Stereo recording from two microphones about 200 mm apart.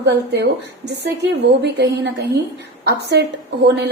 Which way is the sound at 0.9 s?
55° right (ahead or behind).